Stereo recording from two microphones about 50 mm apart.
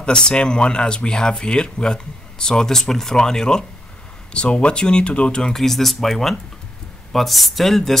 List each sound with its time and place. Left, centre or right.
0.0 s speech: centre
5.5 s speech: centre